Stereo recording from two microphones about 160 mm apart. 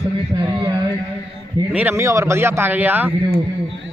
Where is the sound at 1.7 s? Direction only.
15° right (ahead or behind).